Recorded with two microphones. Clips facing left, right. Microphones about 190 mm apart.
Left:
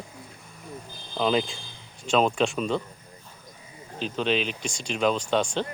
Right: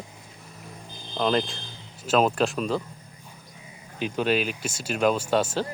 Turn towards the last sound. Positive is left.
turn(degrees=-5)  # may be behind; listen again after turning